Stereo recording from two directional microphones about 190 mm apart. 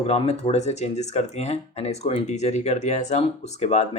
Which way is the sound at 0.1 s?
35° left (ahead or behind).